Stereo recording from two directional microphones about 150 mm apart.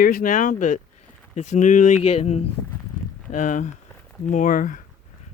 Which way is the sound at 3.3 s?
60° left (ahead or behind).